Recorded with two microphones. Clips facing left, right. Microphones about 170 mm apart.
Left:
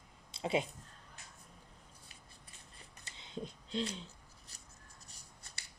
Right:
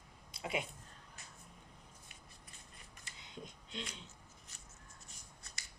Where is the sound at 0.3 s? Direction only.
25° left (ahead or behind).